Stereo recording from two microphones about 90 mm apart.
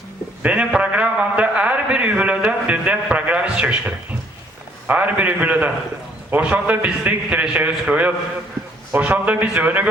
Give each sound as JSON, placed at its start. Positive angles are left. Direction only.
{"t": 0.4, "sound": "a man's voice", "side_deg": -15}